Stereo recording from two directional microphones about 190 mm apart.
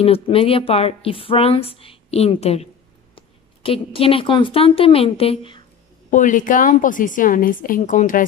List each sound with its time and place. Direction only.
0.0 s a woman's voice: 30° left (ahead or behind)
6.0 s a woman's voice: 45° left (ahead or behind)